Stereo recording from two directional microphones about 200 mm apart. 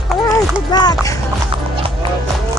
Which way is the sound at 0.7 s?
20° left (ahead or behind).